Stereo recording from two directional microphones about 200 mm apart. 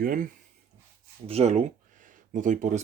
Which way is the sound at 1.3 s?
35° right (ahead or behind).